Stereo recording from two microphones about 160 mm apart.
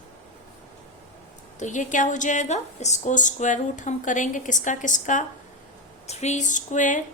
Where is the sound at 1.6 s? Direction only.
50° left (ahead or behind).